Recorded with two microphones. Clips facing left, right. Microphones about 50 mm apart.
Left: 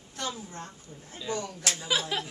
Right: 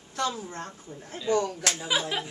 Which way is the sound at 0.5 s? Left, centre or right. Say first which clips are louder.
Right 4 dB; right.